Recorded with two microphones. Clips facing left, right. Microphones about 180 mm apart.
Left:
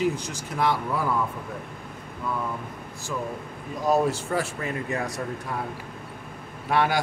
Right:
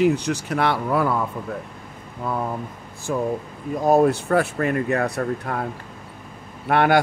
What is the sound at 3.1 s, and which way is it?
Speech, 50° right (ahead or behind).